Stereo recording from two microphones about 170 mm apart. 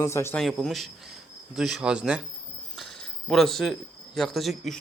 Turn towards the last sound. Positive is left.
turn(degrees=0)  # may be behind; listen again after turning